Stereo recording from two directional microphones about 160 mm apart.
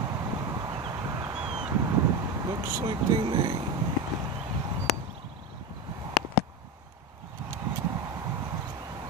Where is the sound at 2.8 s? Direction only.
30° right (ahead or behind).